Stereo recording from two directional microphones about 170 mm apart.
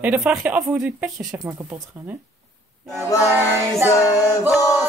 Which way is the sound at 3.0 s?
20° left (ahead or behind).